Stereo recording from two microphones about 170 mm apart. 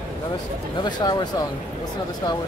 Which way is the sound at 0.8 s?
25° left (ahead or behind).